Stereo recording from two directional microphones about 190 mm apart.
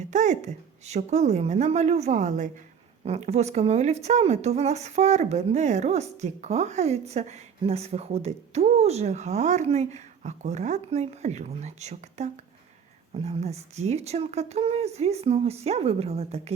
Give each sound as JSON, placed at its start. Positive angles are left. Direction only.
{"t": 0.1, "sound": "speech", "side_deg": -40}